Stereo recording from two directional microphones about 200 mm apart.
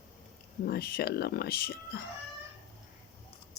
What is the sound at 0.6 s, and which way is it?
Speech, 50° left (ahead or behind).